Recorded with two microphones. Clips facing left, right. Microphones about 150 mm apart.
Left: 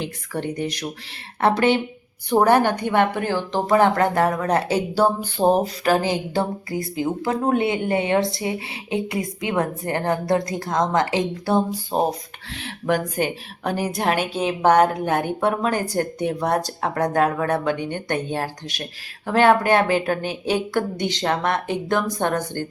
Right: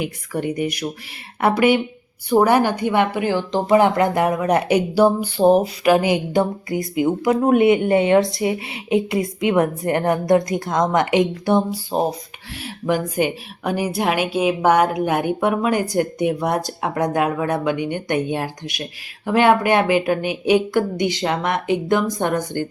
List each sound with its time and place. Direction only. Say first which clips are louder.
0.0 s a woman's voice: right 3 dB; 10° right (ahead or behind)
5.6 s a sound: right 4 dB; 35° left (ahead or behind)
6.0 s a woman's voice: right 4 dB; 15° right (ahead or behind)
13.1 s a woman's voice: right 3 dB; 10° right (ahead or behind)